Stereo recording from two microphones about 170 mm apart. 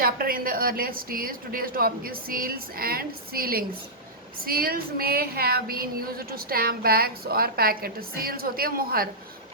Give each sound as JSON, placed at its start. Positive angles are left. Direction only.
{"t": 0.0, "sound": "a woman's voice", "side_deg": -60}